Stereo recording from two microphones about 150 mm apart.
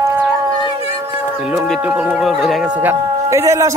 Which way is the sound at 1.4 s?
5° right (ahead or behind).